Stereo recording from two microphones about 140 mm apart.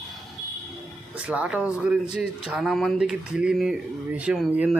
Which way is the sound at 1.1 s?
10° right (ahead or behind).